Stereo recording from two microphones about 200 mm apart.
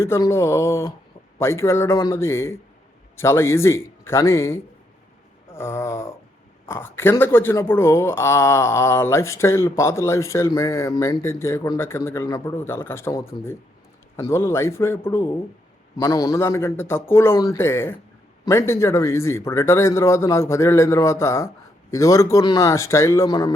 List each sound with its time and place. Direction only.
0.0 s speech: 15° left (ahead or behind)